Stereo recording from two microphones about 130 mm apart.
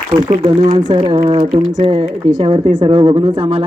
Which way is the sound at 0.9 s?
35° right (ahead or behind).